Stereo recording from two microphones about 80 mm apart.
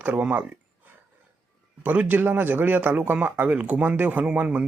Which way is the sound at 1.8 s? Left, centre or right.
Centre.